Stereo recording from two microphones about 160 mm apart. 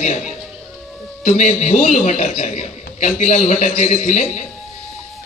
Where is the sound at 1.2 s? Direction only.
50° left (ahead or behind).